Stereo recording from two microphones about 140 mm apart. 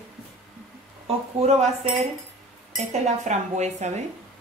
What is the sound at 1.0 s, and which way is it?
A woman's voice, 50° right (ahead or behind).